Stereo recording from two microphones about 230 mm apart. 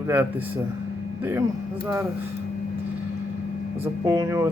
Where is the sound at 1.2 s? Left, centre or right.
Centre.